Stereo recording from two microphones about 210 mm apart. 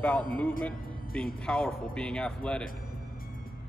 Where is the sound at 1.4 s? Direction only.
5° left (ahead or behind).